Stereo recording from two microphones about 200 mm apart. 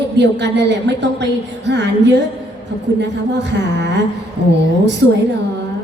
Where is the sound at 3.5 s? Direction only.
60° right (ahead or behind).